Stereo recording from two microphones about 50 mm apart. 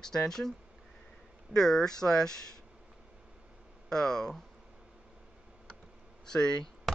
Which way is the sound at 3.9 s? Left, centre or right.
Centre.